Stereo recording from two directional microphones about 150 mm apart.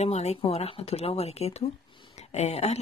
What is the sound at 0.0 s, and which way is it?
Speech, 45° left (ahead or behind).